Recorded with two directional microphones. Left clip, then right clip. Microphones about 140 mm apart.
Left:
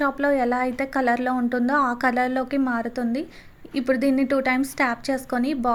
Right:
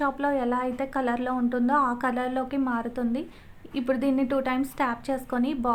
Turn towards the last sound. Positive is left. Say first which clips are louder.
# left 3 dB
turn(degrees=20)  # may be behind; listen again after turning